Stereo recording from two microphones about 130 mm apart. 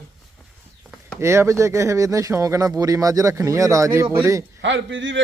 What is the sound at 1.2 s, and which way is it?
Speech, 20° right (ahead or behind).